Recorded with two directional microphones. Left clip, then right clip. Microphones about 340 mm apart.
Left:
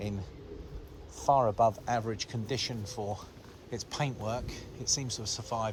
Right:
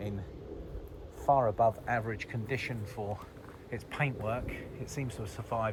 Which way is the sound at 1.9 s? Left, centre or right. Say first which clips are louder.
Left 1 dB; centre.